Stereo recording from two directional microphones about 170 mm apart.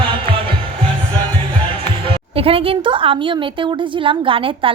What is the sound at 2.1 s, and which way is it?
A woman's voice, 35° right (ahead or behind).